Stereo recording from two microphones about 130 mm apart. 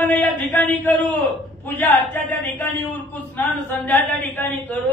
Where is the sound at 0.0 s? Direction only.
15° left (ahead or behind).